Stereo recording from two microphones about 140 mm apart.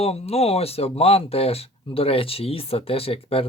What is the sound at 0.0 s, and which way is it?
Speech, 45° left (ahead or behind).